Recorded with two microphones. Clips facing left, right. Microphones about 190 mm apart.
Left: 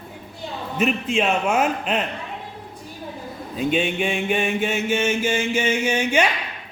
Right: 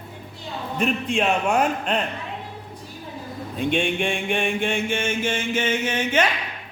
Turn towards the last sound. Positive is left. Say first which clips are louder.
# left 2 dB
turn(degrees=10)  # may be behind; listen again after turning